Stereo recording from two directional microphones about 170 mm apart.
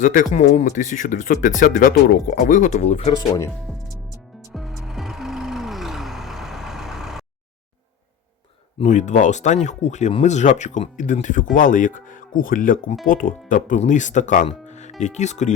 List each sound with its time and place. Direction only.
0.0 s speech: 50° left (ahead or behind)
4.5 s music: centre (ahead or behind)
8.8 s speech: 45° left (ahead or behind)